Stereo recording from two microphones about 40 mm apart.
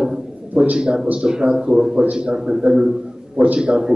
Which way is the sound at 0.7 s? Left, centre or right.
Right.